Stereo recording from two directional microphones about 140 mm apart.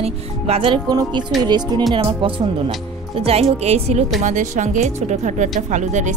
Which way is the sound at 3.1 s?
45° right (ahead or behind).